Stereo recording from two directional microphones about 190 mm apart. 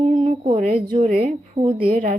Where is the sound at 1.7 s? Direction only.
50° right (ahead or behind).